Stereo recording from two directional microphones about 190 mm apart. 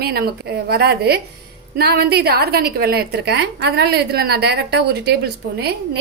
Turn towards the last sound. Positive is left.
turn(degrees=-60)  # may be behind; listen again after turning